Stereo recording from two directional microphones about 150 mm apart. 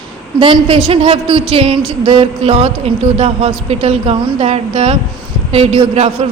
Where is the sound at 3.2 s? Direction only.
45° right (ahead or behind).